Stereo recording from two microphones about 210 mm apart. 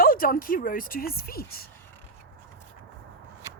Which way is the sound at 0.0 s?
45° left (ahead or behind).